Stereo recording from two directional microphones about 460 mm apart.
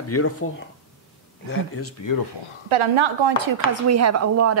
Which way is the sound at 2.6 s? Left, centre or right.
Right.